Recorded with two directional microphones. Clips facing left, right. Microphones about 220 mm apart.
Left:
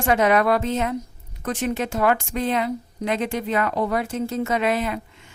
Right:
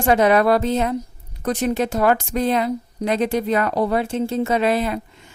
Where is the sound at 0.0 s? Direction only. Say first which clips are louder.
Right 3 dB; 35° right (ahead or behind).